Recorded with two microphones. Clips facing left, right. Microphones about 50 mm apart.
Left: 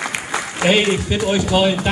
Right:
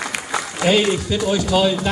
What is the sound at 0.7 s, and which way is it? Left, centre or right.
A man's voice, left.